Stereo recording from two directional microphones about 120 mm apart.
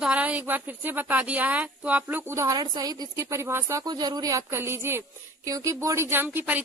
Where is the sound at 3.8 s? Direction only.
35° right (ahead or behind).